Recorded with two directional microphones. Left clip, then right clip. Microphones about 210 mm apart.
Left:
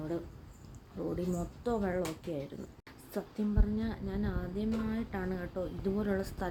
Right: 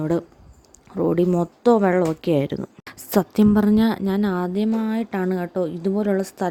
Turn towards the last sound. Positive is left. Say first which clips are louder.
# right 12 dB
turn(degrees=-30)  # may be behind; listen again after turning